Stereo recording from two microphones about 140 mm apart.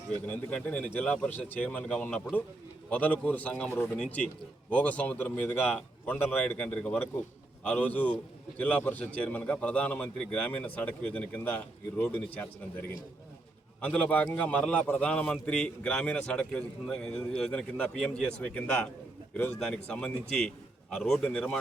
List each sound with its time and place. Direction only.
0.3 s a man's voice: 10° left (ahead or behind)
13.8 s a man's voice: 10° left (ahead or behind)